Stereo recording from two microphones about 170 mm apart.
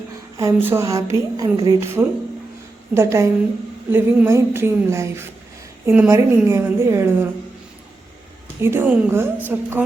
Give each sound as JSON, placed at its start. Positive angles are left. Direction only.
{"t": 0.3, "sound": "a woman's voice", "side_deg": -15}
{"t": 8.6, "sound": "a woman's voice", "side_deg": -15}